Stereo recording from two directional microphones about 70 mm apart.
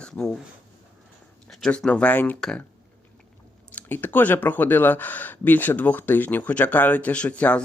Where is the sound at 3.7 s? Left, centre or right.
Left.